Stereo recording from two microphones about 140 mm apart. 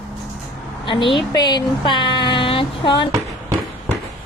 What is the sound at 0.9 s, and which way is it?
Speech, 35° left (ahead or behind).